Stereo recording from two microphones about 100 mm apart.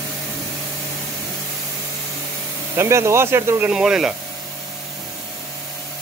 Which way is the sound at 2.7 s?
30° right (ahead or behind).